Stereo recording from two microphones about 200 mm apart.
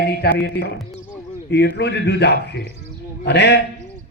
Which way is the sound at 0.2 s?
50° left (ahead or behind).